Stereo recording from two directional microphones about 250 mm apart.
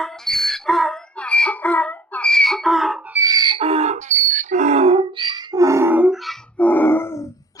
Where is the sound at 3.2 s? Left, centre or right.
Centre.